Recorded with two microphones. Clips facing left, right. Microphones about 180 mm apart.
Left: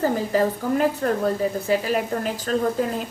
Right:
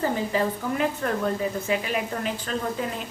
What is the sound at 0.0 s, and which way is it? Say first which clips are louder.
A woman's voice: left 4 dB; 40° left (ahead or behind).